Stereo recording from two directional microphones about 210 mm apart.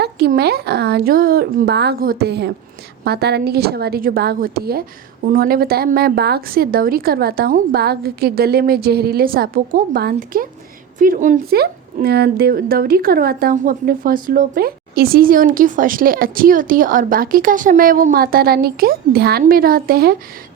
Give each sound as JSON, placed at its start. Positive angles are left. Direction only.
{"t": 0.0, "sound": "speech", "side_deg": -50}